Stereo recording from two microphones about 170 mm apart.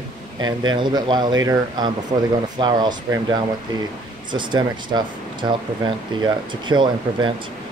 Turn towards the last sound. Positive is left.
turn(degrees=-25)  # may be behind; listen again after turning